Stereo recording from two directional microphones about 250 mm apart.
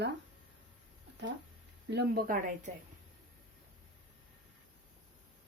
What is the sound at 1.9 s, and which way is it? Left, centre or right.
Speech, right.